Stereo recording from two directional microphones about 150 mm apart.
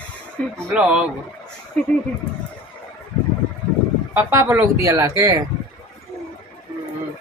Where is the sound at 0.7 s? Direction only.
5° right (ahead or behind).